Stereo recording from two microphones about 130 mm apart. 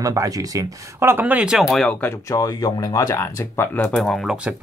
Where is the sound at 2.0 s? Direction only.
25° left (ahead or behind).